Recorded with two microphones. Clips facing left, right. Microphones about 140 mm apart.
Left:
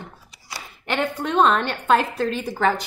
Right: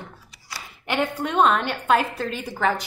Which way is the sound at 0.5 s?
20° left (ahead or behind).